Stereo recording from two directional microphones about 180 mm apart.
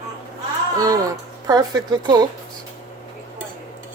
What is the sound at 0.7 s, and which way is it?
Speech, 20° right (ahead or behind).